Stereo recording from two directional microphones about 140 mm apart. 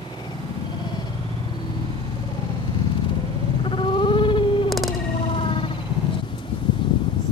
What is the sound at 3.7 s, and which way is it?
Sheep, 35° left (ahead or behind).